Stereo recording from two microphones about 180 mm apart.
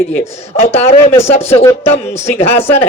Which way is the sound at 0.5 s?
35° left (ahead or behind).